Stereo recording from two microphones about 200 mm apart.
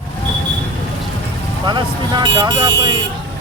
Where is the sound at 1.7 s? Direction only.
20° right (ahead or behind).